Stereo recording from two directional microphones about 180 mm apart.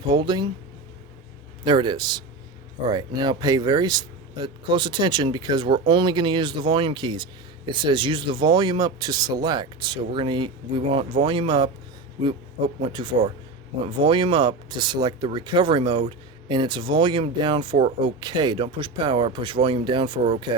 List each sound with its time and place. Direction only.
0.1 s speech: 25° right (ahead or behind)
1.6 s speech: 25° right (ahead or behind)
12.8 s speech: 25° right (ahead or behind)